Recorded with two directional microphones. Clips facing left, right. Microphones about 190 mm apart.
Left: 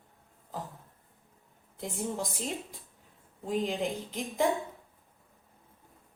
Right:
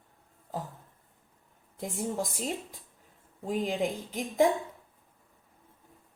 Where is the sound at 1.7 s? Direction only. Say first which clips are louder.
Right 2 dB; centre (ahead or behind).